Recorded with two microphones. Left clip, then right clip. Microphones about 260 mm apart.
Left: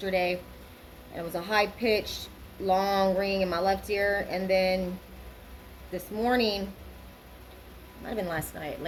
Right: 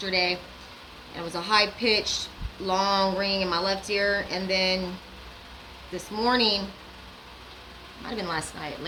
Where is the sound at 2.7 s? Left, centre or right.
Right.